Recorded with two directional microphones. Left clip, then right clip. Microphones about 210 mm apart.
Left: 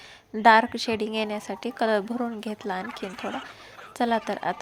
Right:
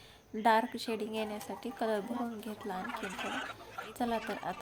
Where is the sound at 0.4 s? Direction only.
25° left (ahead or behind).